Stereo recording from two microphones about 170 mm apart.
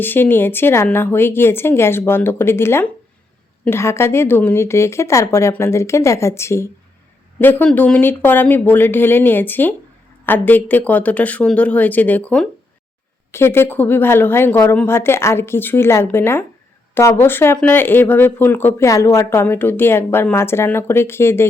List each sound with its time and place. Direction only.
0.0 s speech: 10° left (ahead or behind)